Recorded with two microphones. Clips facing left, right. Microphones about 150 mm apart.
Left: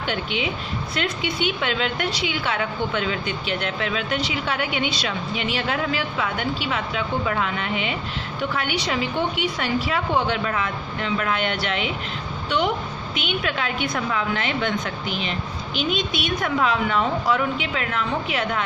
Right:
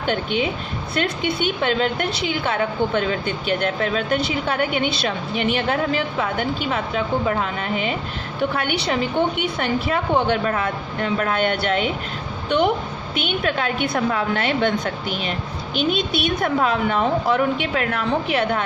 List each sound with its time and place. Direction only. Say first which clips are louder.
0.0 s a woman's voice: right 4 dB; 45° right (ahead or behind)
8.4 s a woman's voice: right 4 dB; 55° right (ahead or behind)